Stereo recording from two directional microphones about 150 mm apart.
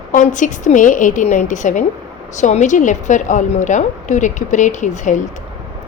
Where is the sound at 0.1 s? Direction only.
60° left (ahead or behind).